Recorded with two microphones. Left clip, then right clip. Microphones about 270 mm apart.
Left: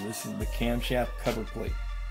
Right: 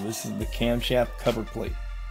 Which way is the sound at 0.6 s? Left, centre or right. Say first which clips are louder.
Right 5 dB; right.